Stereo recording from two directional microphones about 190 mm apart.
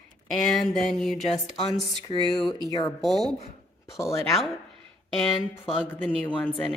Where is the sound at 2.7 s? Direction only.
20° left (ahead or behind).